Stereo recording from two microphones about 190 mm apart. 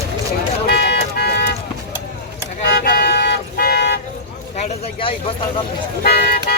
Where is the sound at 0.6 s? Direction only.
60° left (ahead or behind).